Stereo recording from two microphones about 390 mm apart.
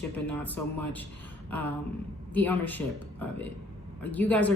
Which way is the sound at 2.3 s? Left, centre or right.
Centre.